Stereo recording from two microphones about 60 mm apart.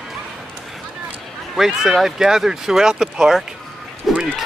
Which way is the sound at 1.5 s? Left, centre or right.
Centre.